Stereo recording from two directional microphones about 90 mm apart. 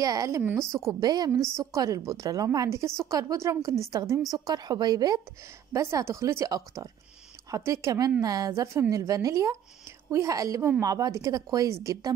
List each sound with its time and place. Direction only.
0.0 s a woman's voice: 45° right (ahead or behind)
0.6 s a woman's voice: 30° right (ahead or behind)
1.0 s a woman's voice: 45° right (ahead or behind)
1.3 s a woman's voice: 35° right (ahead or behind)
4.3 s a woman's voice: 50° right (ahead or behind)
5.7 s a woman's voice: 35° right (ahead or behind)